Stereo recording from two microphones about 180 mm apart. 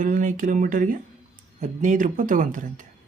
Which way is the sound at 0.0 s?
45° right (ahead or behind).